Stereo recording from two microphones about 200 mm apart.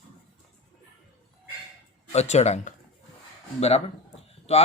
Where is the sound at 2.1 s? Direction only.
35° left (ahead or behind).